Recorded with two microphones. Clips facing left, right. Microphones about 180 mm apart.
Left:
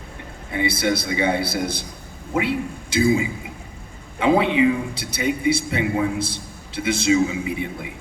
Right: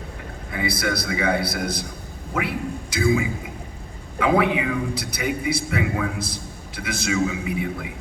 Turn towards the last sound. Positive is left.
turn(degrees=25)  # may be behind; listen again after turning